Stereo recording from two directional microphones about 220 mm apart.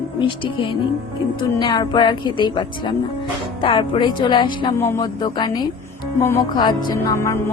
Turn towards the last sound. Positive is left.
turn(degrees=15)  # may be behind; listen again after turning